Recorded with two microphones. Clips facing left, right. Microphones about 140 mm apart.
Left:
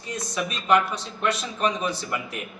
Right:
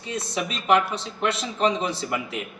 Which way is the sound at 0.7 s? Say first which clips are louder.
Right 1 dB; 25° right (ahead or behind).